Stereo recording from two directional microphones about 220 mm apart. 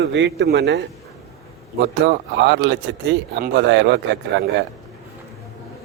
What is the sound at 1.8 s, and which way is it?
Speech, 50° right (ahead or behind).